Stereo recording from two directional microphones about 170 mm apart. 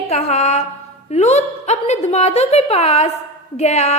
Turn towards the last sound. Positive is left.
turn(degrees=40)  # may be behind; listen again after turning